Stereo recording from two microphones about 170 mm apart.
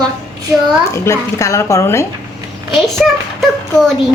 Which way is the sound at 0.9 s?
15° left (ahead or behind).